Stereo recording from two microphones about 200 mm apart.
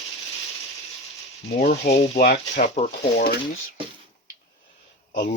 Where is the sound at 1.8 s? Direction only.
45° left (ahead or behind).